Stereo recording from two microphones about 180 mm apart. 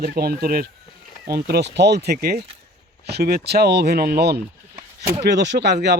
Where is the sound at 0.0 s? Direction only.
55° right (ahead or behind).